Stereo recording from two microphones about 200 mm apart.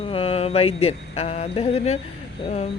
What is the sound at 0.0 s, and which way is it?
Speech, 30° left (ahead or behind).